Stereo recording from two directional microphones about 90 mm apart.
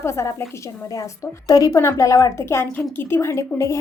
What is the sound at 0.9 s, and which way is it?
A woman's voice, 40° left (ahead or behind).